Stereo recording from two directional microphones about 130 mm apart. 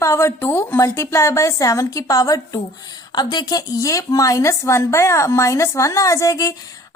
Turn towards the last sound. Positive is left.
turn(degrees=25)  # may be behind; listen again after turning